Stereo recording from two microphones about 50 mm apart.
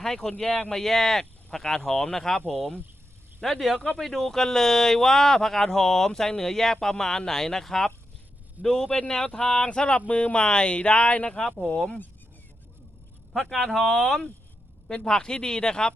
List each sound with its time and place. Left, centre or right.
0.0 s speech: centre; by 11.3 s left
11.3 s speech: centre
13.3 s speech: centre